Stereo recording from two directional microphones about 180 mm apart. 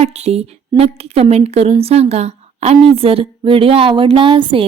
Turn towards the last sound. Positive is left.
turn(degrees=-30)  # may be behind; listen again after turning